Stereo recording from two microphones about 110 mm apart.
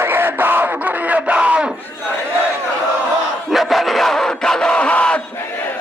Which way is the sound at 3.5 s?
Centre (ahead or behind).